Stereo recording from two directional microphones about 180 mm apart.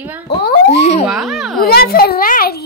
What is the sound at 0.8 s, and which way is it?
Speech, 40° left (ahead or behind).